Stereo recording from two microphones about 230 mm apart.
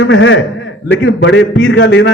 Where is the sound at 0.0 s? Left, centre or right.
Left.